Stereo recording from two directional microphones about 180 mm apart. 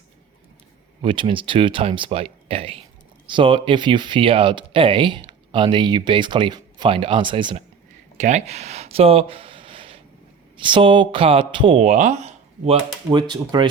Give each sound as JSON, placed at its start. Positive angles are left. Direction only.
{"t": 1.0, "sound": "speech", "side_deg": -30}
{"t": 8.2, "sound": "speech", "side_deg": -40}
{"t": 13.1, "sound": "speech", "side_deg": -25}